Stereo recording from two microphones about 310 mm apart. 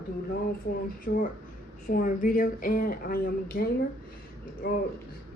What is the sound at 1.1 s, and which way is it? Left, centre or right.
Speech, left.